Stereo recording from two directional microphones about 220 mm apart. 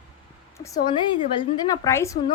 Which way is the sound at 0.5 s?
20° left (ahead or behind).